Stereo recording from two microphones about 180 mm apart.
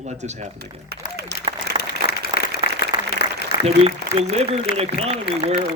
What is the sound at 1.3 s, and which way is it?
Applause, 70° right (ahead or behind).